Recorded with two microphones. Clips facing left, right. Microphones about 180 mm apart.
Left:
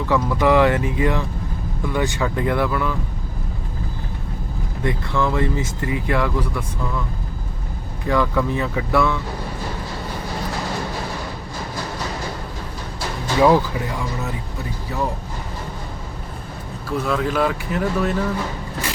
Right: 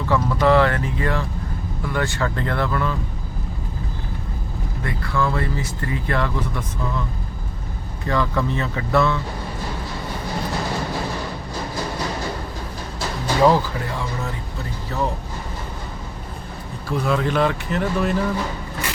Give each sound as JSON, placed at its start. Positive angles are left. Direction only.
{"t": 0.1, "sound": "speech", "side_deg": 15}
{"t": 4.8, "sound": "speech", "side_deg": 20}
{"t": 8.0, "sound": "speech", "side_deg": 10}
{"t": 13.4, "sound": "speech", "side_deg": 15}
{"t": 17.0, "sound": "speech", "side_deg": 0}